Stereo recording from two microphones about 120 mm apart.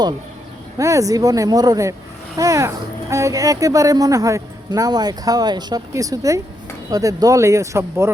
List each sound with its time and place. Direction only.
0.8 s speech: 25° right (ahead or behind)